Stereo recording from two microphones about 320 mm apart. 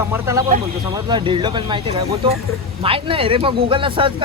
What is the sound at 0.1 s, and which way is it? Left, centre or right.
Speech, centre.